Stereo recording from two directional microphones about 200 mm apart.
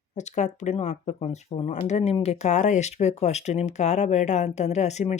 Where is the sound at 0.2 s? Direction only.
35° left (ahead or behind).